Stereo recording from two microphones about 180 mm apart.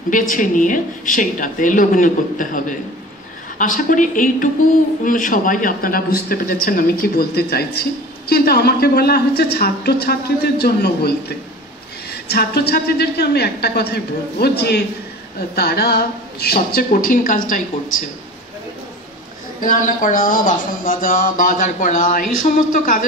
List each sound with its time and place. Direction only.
0.3 s a woman's voice: 45° left (ahead or behind)
19.6 s speech: 50° left (ahead or behind)